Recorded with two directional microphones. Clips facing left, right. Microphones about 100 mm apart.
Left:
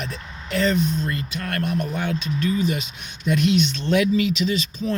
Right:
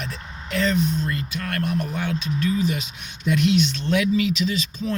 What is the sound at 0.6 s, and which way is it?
Speech, centre (ahead or behind).